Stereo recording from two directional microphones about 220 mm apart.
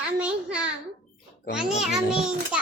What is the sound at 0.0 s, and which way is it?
A child's voice, 5° right (ahead or behind).